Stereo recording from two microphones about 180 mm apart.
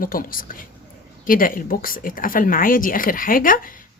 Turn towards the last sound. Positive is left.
turn(degrees=50)  # may be behind; listen again after turning